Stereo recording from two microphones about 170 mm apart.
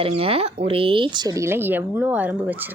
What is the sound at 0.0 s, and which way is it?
Speech, 35° right (ahead or behind).